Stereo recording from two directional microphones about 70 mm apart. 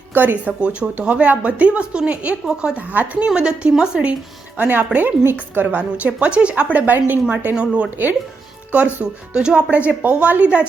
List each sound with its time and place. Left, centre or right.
0.1 s speech: right
0.6 s speech: centre
4.5 s a woman's voice: right
5.6 s speech: centre
7.5 s speech: centre
9.3 s speech: centre